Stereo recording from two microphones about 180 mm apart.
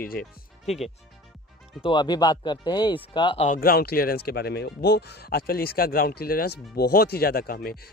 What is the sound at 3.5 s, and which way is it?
Speech, 55° left (ahead or behind).